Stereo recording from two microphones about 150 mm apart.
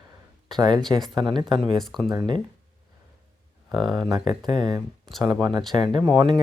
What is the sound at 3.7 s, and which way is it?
Speech, 30° right (ahead or behind).